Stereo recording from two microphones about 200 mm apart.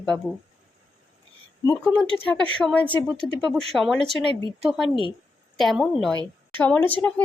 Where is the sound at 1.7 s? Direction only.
5° left (ahead or behind).